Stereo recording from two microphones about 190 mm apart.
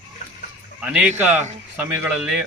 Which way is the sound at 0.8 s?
5° right (ahead or behind).